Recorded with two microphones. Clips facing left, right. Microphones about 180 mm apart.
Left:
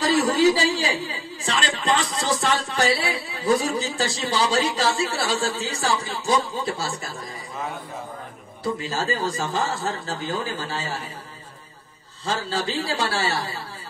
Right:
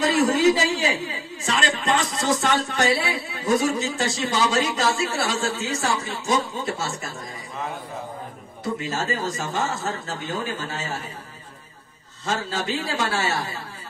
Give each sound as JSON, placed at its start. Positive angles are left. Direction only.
{"t": 0.0, "sound": "speech", "side_deg": 35}
{"t": 8.7, "sound": "speech", "side_deg": 30}
{"t": 12.3, "sound": "speech", "side_deg": 30}